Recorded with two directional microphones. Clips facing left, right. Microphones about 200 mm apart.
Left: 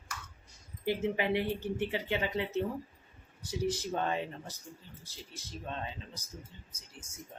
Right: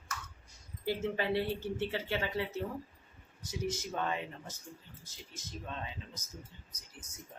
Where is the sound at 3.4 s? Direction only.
30° left (ahead or behind).